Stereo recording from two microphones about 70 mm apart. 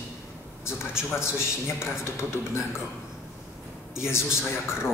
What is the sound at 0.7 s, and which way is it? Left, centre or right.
Speech, left.